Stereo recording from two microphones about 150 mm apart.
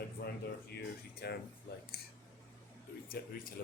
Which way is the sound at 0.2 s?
90° left.